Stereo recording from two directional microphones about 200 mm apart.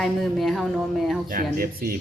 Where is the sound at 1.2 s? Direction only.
45° right (ahead or behind).